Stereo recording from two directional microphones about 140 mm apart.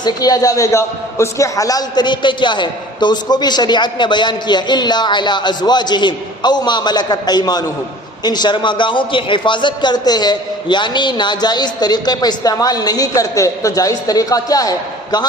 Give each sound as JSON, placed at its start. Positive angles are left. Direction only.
{"t": 0.0, "sound": "a man's voice", "side_deg": 25}